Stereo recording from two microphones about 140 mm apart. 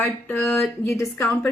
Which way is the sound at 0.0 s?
15° left (ahead or behind).